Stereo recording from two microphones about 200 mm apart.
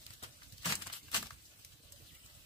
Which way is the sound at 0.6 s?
25° left (ahead or behind).